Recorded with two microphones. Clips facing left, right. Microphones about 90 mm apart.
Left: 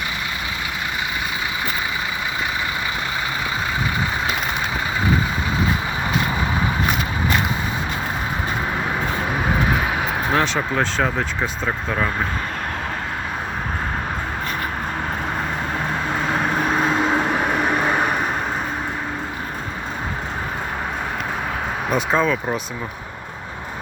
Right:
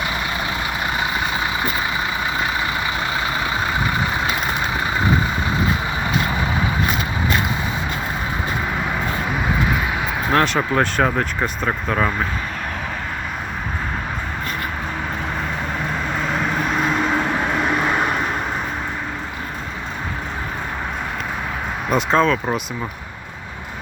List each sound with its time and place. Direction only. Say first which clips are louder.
10.3 s speech: right 4 dB; centre (ahead or behind)
16.3 s vehicle: left 2 dB; 40° left (ahead or behind)
16.7 s vehicle: even; 25° left (ahead or behind); by 18.3 s 5° left (ahead or behind)
21.8 s speech: right 3 dB; 5° left (ahead or behind)